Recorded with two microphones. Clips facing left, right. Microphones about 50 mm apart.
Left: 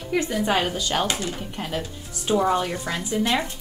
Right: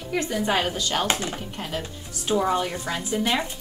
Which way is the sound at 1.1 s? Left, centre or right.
Right.